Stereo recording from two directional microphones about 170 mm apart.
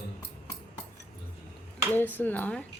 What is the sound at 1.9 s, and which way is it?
Speech, 10° left (ahead or behind).